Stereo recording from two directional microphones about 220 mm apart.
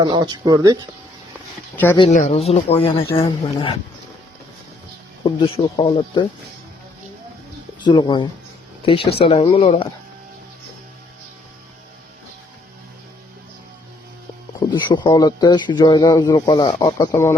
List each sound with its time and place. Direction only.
0.0 s speech: 20° right (ahead or behind)
1.7 s speech: 10° left (ahead or behind)
2.1 s speech: 30° left (ahead or behind)
5.2 s speech: 20° left (ahead or behind)
7.8 s speech: 20° left (ahead or behind)
14.6 s speech: 20° left (ahead or behind)